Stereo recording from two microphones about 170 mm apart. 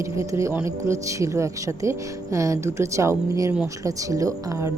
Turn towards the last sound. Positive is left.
turn(degrees=-20)  # may be behind; listen again after turning